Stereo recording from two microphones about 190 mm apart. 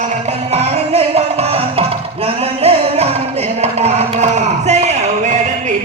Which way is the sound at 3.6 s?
35° right (ahead or behind).